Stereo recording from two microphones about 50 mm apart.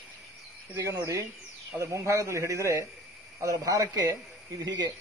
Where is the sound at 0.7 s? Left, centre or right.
Right.